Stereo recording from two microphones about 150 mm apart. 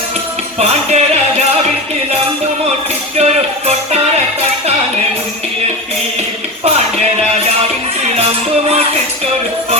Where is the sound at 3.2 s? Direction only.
45° right (ahead or behind).